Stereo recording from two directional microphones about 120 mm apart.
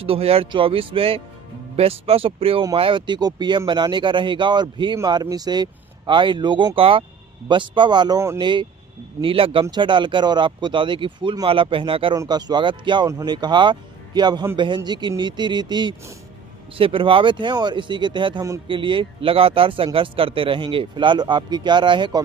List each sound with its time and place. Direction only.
0.0 s a man's voice: 55° right (ahead or behind)
12.2 s a man's voice: 35° right (ahead or behind)